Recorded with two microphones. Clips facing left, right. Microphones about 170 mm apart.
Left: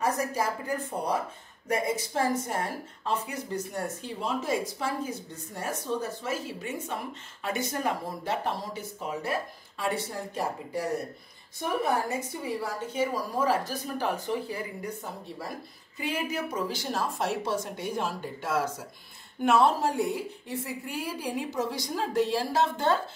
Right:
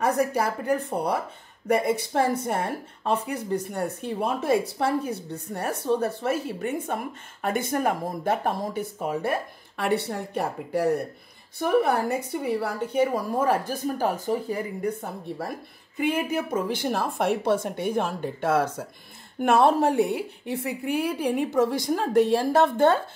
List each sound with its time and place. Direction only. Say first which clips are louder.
0.0 s speech: right 5 dB; 65° right (ahead or behind); by 14.6 s 40° right (ahead or behind)
14.8 s speech: right 7 dB; 55° right (ahead or behind)